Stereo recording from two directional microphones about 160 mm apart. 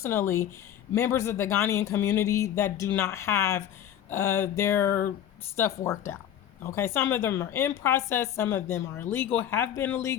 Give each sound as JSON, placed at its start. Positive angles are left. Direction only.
{"t": 0.0, "sound": "speech", "side_deg": 15}